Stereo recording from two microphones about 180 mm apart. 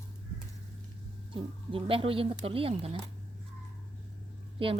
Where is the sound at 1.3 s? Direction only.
30° right (ahead or behind).